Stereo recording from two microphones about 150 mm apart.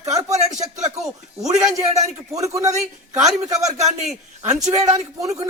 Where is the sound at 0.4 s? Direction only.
50° right (ahead or behind).